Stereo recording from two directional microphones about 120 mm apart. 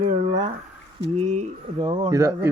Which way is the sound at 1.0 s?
65° right (ahead or behind).